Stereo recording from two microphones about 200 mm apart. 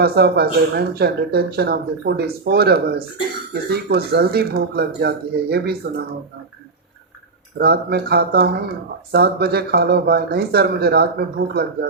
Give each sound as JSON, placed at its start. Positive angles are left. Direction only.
{"t": 0.0, "sound": "speech", "side_deg": -50}
{"t": 7.6, "sound": "speech", "side_deg": -55}